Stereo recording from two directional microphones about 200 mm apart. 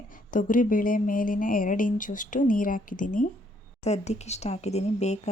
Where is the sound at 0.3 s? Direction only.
40° left (ahead or behind).